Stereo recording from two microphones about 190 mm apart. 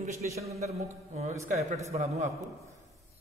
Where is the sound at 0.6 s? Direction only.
35° right (ahead or behind).